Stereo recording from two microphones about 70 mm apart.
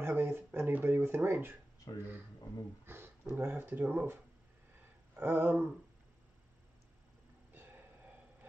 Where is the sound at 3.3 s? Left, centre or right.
Right.